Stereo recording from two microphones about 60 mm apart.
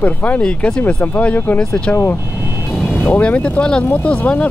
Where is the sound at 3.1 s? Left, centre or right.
Left.